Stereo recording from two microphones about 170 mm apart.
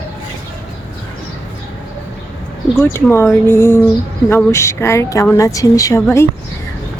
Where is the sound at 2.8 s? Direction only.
15° left (ahead or behind).